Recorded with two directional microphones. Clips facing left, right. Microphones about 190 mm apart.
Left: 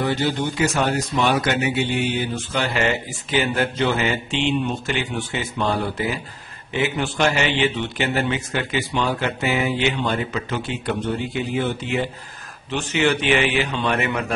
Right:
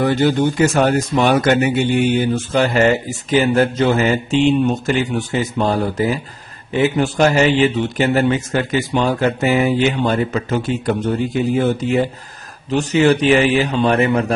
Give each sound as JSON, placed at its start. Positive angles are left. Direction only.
{"t": 0.0, "sound": "a man's voice", "side_deg": -50}